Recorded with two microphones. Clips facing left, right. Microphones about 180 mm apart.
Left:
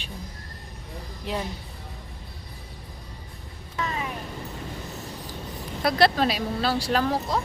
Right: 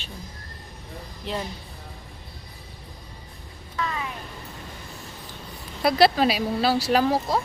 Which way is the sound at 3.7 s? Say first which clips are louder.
Right 1 dB; 25° left (ahead or behind).